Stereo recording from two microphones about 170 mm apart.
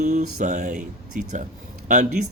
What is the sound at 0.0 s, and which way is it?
A man's voice, 45° right (ahead or behind).